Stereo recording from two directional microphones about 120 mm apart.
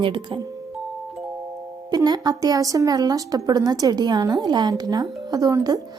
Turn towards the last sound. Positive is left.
turn(degrees=-30)  # may be behind; listen again after turning